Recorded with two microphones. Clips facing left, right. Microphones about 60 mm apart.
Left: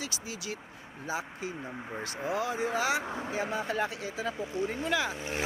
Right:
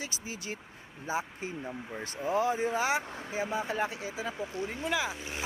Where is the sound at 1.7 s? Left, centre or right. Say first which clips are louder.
Left 1 dB; centre.